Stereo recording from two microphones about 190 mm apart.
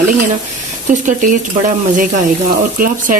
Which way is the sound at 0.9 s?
45° right (ahead or behind).